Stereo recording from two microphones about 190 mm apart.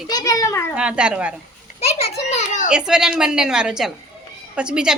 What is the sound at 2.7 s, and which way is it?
A woman's voice, 5° right (ahead or behind).